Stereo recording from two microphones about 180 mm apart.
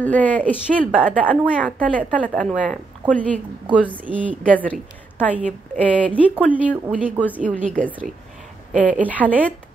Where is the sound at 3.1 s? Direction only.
10° left (ahead or behind).